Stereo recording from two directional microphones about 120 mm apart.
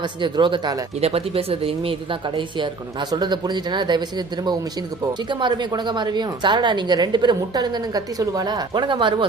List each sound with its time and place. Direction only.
0.2 s a woman's voice: 40° right (ahead or behind)
1.0 s speech: 55° right (ahead or behind)
3.1 s a woman's voice: 35° right (ahead or behind)
5.3 s a woman's voice: 40° right (ahead or behind)